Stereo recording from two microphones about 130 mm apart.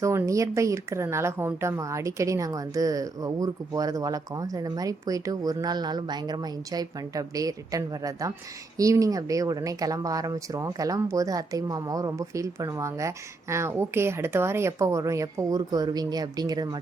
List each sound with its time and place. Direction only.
0.0 s a woman's voice: 25° right (ahead or behind)